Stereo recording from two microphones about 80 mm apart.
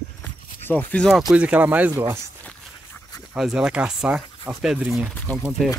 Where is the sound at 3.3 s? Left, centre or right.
Centre.